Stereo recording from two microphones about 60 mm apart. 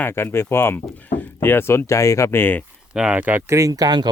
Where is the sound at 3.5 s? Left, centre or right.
Right.